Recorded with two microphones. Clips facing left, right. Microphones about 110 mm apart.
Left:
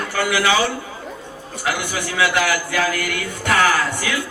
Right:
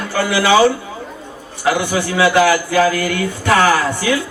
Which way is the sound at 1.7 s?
25° right (ahead or behind).